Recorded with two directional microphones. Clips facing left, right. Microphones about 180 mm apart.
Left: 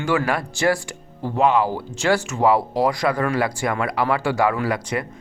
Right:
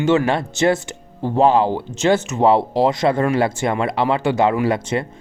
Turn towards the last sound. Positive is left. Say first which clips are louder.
# right 4 dB
turn(degrees=-25)  # may be behind; listen again after turning